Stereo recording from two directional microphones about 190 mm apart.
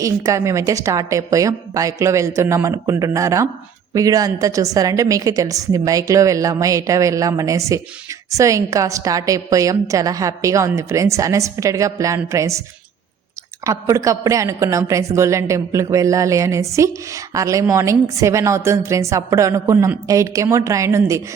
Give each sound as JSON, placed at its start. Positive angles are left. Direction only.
{"t": 0.0, "sound": "a woman's voice", "side_deg": -15}
{"t": 13.7, "sound": "a woman's voice", "side_deg": -15}